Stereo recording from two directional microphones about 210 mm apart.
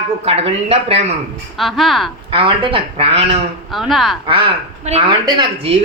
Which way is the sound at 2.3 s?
25° right (ahead or behind).